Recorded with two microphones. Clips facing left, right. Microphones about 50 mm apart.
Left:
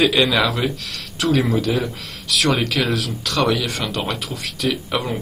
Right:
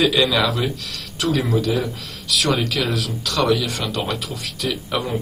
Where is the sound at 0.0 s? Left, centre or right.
Left.